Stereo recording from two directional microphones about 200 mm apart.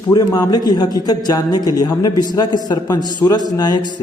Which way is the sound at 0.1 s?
20° left (ahead or behind).